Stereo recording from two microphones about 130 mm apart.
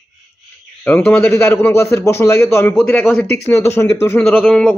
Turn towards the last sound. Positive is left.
turn(degrees=5)  # may be behind; listen again after turning